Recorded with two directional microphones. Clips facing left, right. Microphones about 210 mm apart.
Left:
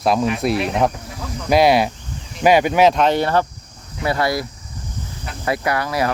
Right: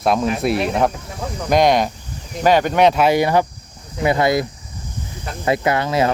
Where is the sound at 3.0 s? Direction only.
10° right (ahead or behind).